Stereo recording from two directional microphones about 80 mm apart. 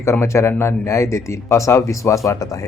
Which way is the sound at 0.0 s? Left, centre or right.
Left.